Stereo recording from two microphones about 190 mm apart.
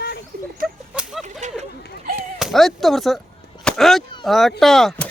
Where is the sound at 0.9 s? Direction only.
5° right (ahead or behind).